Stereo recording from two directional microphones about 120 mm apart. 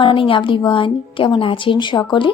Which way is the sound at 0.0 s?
45° left (ahead or behind).